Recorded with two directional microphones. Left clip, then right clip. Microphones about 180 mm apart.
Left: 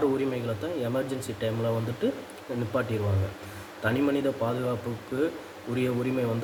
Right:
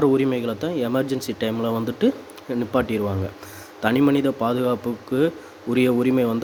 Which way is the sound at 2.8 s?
55° right (ahead or behind).